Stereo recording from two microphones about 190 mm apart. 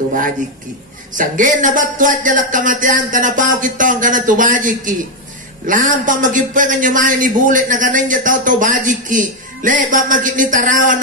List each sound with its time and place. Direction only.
1.1 s a man's voice: 45° right (ahead or behind)